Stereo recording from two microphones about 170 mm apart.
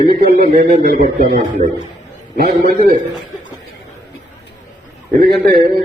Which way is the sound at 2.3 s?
60° right (ahead or behind).